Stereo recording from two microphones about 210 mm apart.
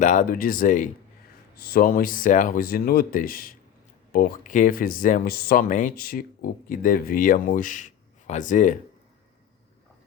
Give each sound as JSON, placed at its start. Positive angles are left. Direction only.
{"t": 0.0, "sound": "speech", "side_deg": 35}